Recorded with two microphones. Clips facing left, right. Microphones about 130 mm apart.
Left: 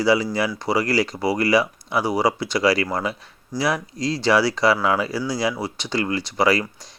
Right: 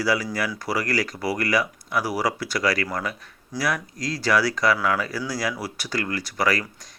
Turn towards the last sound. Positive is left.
turn(degrees=25)  # may be behind; listen again after turning